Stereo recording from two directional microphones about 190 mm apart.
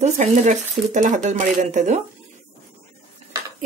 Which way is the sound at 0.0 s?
40° right (ahead or behind).